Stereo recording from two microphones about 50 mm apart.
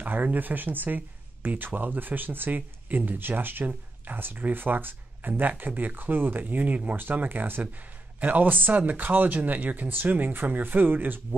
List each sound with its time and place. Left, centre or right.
0.0 s speech: right